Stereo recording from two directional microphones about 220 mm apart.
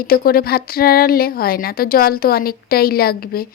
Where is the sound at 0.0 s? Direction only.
45° left (ahead or behind).